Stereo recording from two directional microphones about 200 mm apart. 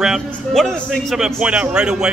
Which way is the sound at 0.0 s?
Centre (ahead or behind).